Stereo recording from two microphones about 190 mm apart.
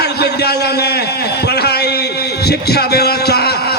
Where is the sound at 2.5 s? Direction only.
55° left (ahead or behind).